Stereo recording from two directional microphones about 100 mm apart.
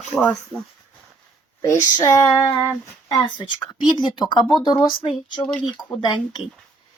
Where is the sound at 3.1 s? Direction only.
50° left (ahead or behind).